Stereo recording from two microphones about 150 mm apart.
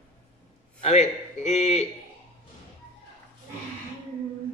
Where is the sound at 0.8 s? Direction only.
50° left (ahead or behind).